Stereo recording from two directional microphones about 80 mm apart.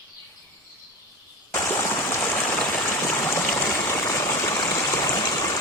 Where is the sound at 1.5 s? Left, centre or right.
Left.